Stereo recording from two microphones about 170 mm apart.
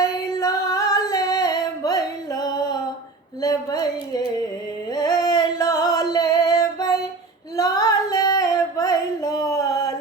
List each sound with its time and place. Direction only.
0.0 s female singing: 20° left (ahead or behind)
3.4 s a sound: 20° left (ahead or behind)
5.2 s female singing: 20° left (ahead or behind)